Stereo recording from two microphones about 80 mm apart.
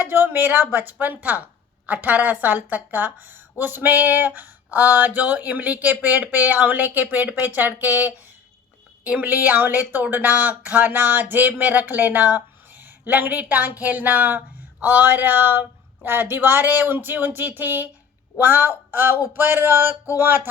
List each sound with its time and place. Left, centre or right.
0.0 s a woman's voice: right